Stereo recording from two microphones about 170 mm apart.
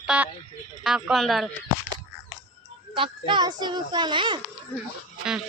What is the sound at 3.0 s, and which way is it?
A child's voice, 30° right (ahead or behind).